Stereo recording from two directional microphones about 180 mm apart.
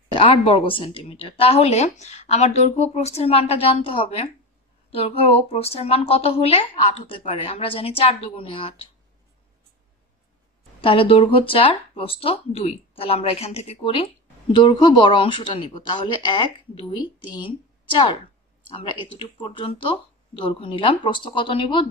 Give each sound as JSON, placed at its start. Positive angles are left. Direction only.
{"t": 0.1, "sound": "a woman's voice", "side_deg": 30}
{"t": 10.8, "sound": "a woman's voice", "side_deg": 30}